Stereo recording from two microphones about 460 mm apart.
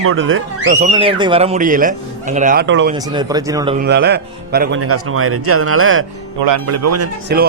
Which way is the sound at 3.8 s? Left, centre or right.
Right.